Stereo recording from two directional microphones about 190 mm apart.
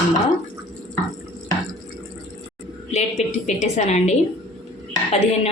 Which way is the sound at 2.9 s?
35° left (ahead or behind).